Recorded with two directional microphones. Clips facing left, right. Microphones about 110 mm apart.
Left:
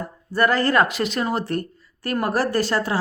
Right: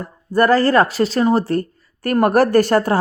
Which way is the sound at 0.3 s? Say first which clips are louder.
Right 5 dB; 40° right (ahead or behind).